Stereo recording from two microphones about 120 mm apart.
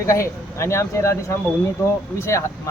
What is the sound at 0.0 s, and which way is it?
Speech, 25° left (ahead or behind).